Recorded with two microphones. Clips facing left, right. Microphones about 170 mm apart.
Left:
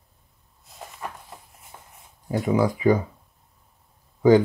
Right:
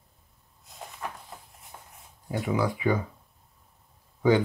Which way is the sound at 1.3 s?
Centre (ahead or behind).